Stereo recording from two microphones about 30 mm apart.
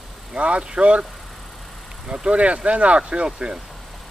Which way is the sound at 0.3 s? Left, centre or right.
Right.